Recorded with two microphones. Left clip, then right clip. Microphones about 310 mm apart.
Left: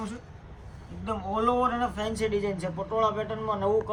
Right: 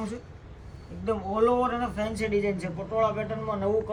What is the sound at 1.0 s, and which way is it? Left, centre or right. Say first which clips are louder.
A man's voice: right 3 dB; centre.